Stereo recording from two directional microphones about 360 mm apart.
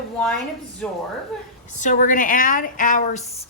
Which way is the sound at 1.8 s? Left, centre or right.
Left.